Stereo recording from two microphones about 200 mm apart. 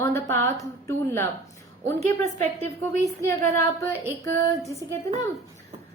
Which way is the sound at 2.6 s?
15° left (ahead or behind).